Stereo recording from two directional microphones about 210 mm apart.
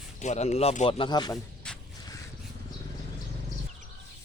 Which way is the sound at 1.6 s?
5° left (ahead or behind).